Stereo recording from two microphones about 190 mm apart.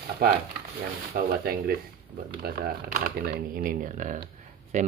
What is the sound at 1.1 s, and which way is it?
Speech, 55° right (ahead or behind).